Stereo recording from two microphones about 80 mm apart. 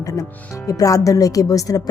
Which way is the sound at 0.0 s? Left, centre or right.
Left.